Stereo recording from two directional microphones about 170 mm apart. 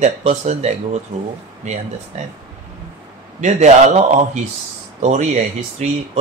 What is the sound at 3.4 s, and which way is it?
Speech, 45° right (ahead or behind).